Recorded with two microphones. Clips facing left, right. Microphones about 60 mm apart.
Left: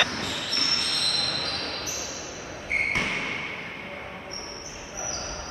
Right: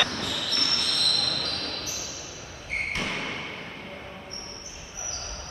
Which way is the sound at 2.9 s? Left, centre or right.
Centre.